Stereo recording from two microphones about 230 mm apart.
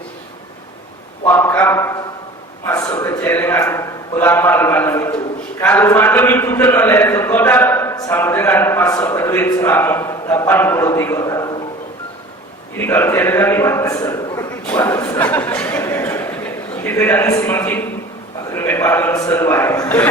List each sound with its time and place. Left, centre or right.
1.2 s a sound: centre
2.6 s a man's voice: centre
12.8 s a man's voice: centre